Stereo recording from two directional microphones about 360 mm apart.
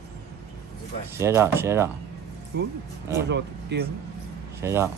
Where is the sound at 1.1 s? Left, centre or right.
Centre.